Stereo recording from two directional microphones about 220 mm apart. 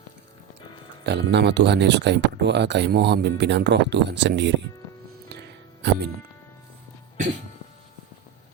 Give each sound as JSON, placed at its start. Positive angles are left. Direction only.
{"t": 1.0, "sound": "speech", "side_deg": -50}
{"t": 5.8, "sound": "speech", "side_deg": -50}